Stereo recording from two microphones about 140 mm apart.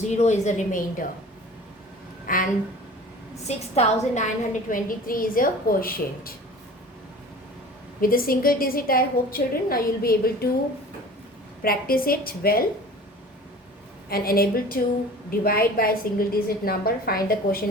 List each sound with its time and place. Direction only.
0.0 s a woman's voice: 55° left (ahead or behind)
2.2 s speech: 80° left
3.4 s a woman's voice: 55° left (ahead or behind)
4.7 s a woman's voice: 80° left
8.0 s a woman's voice: 90° left
11.6 s a woman's voice: 90° left
14.1 s a woman's voice: 90° left